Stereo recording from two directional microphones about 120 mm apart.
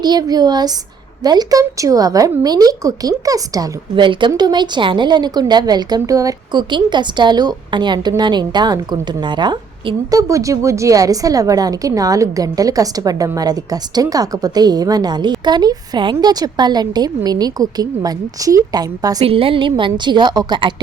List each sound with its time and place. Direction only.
0.0 s a woman's voice: 35° right (ahead or behind)
19.2 s a woman's voice: 50° right (ahead or behind)